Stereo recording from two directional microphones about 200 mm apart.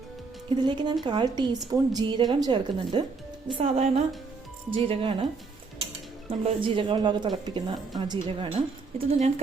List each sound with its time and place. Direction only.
0.5 s a woman's voice: 20° right (ahead or behind)
6.2 s speech: 25° right (ahead or behind)
9.0 s a woman's voice: 35° right (ahead or behind)